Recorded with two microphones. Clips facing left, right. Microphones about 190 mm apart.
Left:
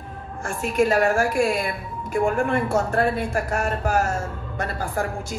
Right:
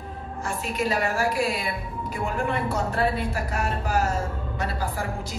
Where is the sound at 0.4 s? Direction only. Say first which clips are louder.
Left 6 dB; 50° left (ahead or behind).